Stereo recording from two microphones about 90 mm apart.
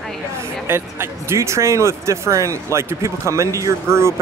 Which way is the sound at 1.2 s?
35° right (ahead or behind).